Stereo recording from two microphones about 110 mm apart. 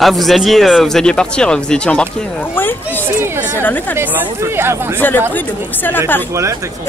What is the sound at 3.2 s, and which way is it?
Speech, 20° right (ahead or behind).